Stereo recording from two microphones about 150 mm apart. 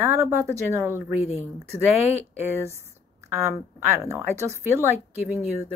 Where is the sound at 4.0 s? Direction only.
20° right (ahead or behind).